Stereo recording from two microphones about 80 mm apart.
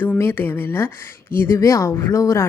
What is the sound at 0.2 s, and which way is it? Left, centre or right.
Speech, left.